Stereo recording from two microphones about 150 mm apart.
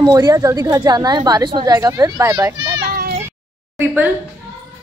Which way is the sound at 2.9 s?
80° right.